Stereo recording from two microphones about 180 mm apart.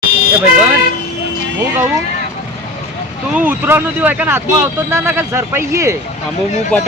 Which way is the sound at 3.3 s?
10° right (ahead or behind).